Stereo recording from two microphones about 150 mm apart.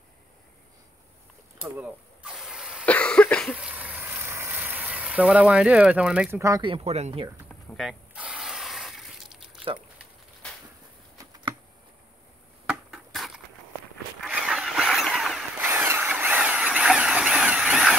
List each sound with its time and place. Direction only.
1.6 s vehicle: 10° right (ahead or behind)
2.8 s cough: 10° left (ahead or behind)
3.5 s frying: 10° right (ahead or behind)
6.6 s speech: 40° right (ahead or behind)
7.4 s a sound: 5° left (ahead or behind)
8.1 s sanding: 10° right (ahead or behind)
12.6 s a sound: centre (ahead or behind)
14.2 s vehicle: centre (ahead or behind)
15.6 s a sound: 15° right (ahead or behind)